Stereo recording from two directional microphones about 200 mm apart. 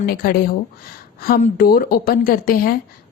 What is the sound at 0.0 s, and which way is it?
Speech, 50° left (ahead or behind).